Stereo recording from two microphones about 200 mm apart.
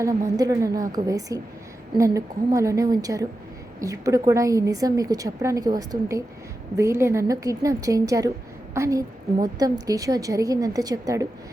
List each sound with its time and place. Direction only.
0.0 s a woman's voice: 15° right (ahead or behind)